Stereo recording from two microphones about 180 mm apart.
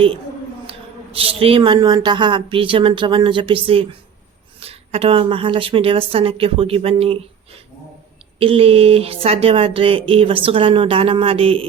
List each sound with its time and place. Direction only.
0.7 s a man's voice: 30° right (ahead or behind)
8.4 s speech: 30° right (ahead or behind)